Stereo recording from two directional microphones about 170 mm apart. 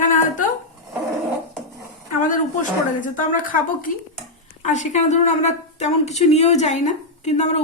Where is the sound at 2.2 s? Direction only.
50° left (ahead or behind).